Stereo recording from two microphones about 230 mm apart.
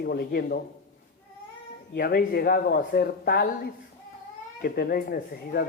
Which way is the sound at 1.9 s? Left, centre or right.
Left.